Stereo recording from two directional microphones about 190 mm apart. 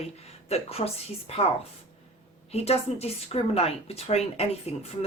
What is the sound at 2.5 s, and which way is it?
Speech, 35° left (ahead or behind).